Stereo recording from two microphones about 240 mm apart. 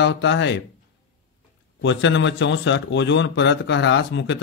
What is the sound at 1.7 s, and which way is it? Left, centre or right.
A man's voice, left.